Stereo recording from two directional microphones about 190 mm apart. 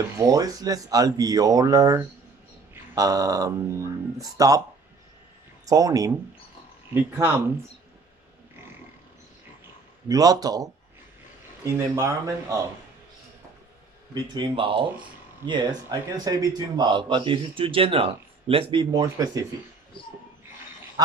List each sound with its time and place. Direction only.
0.2 s speech: 20° right (ahead or behind)
2.7 s a sound: 15° right (ahead or behind)
4.2 s speech: 20° right (ahead or behind)
5.7 s speech: 20° right (ahead or behind)
10.0 s speech: 20° right (ahead or behind)
14.1 s speech: 25° right (ahead or behind)